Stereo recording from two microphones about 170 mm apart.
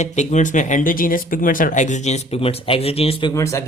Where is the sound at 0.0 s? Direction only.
45° left (ahead or behind).